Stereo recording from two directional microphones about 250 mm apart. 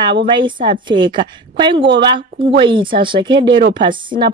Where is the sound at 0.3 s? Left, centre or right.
Centre.